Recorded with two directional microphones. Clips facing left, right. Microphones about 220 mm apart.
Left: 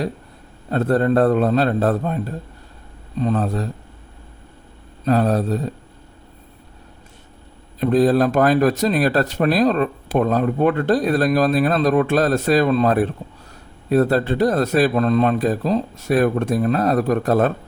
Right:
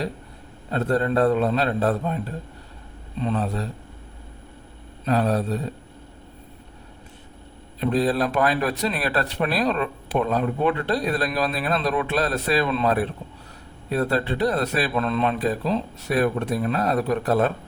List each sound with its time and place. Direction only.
0.7 s speech: 45° left (ahead or behind)
3.2 s speech: 45° left (ahead or behind)
5.0 s speech: 45° left (ahead or behind)
7.8 s speech: 45° left (ahead or behind)